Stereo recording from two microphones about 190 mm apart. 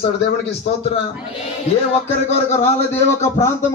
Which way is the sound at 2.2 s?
35° left (ahead or behind).